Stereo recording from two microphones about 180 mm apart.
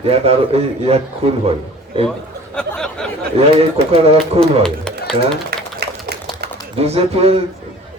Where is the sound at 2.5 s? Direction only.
5° left (ahead or behind).